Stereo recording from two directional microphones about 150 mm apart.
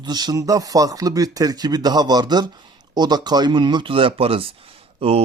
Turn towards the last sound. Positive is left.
turn(degrees=-40)  # may be behind; listen again after turning